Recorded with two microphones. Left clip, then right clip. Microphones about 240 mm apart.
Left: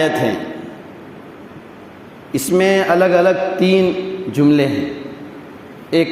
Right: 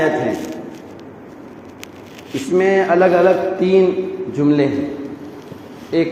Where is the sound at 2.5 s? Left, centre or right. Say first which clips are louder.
Left 1 dB; left.